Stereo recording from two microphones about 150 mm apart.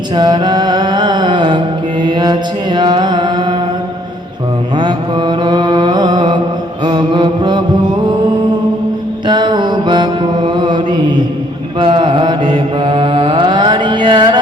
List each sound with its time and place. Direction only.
0.2 s music: 30° right (ahead or behind)
4.8 s mantra: 30° right (ahead or behind)
9.2 s mantra: 30° right (ahead or behind)